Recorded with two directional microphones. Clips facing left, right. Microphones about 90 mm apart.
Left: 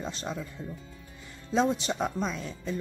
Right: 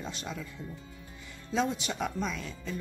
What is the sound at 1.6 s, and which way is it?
Speech, 35° left (ahead or behind).